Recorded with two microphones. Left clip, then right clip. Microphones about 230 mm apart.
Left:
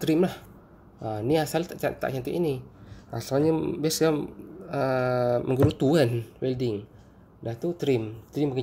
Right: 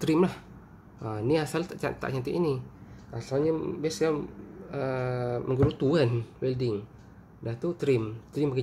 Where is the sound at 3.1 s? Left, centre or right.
Left; by 8.6 s centre.